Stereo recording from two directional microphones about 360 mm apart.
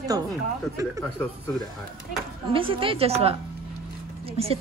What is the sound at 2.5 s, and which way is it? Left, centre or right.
A woman's voice, centre.